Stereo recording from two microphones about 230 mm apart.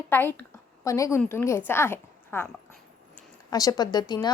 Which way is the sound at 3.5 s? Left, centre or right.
Centre.